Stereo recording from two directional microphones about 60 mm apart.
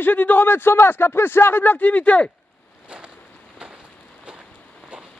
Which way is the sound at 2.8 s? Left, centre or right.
Centre.